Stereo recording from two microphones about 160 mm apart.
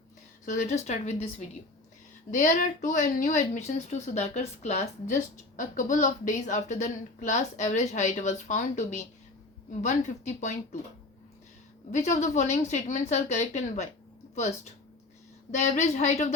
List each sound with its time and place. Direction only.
0.4 s a woman's voice: 50° left (ahead or behind)
2.3 s a woman's voice: 55° left (ahead or behind)
12.1 s a woman's voice: 45° left (ahead or behind)